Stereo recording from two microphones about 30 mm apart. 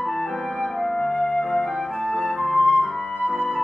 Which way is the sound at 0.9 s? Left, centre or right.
Centre.